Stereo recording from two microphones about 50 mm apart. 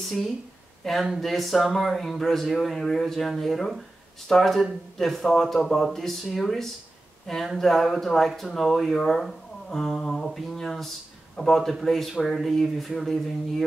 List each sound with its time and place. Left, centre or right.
0.0 s a man's voice: centre